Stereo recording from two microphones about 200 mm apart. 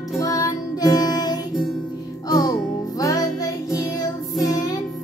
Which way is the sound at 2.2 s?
20° left (ahead or behind).